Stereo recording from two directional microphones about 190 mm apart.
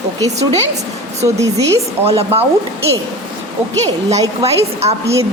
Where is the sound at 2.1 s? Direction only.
30° right (ahead or behind).